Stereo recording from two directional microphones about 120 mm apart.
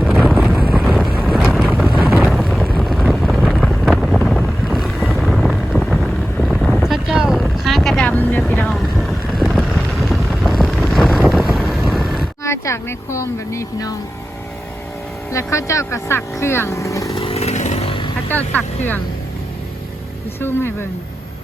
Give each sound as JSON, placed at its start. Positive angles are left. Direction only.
{"t": 0.3, "sound": "wind noise", "side_deg": -5}
{"t": 1.5, "sound": "vehicle", "side_deg": -5}
{"t": 2.8, "sound": "wind noise", "side_deg": 0}
{"t": 6.5, "sound": "vehicle", "side_deg": 0}
{"t": 8.0, "sound": "boat", "side_deg": 15}
{"t": 10.8, "sound": "vehicle", "side_deg": 0}
{"t": 12.4, "sound": "speech", "side_deg": 25}
{"t": 15.3, "sound": "speech", "side_deg": 25}
{"t": 17.2, "sound": "chainsaw", "side_deg": 55}
{"t": 17.8, "sound": "vehicle", "side_deg": 45}
{"t": 18.3, "sound": "speech", "side_deg": 15}
{"t": 20.4, "sound": "speech", "side_deg": 20}